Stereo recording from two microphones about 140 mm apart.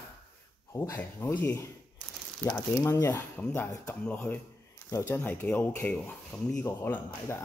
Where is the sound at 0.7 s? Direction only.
20° left (ahead or behind).